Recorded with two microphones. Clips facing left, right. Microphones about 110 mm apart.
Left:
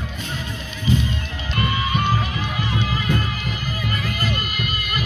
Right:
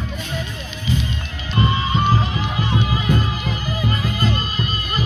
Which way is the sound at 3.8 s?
25° right (ahead or behind).